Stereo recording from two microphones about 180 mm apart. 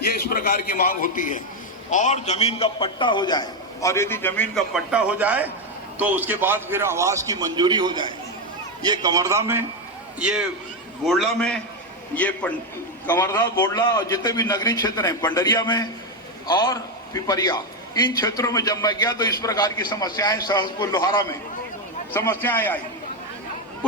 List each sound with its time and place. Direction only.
0.3 s a man's voice: 50° left (ahead or behind); by 4.4 s 10° left (ahead or behind)
4.5 s a man's voice: 5° right (ahead or behind)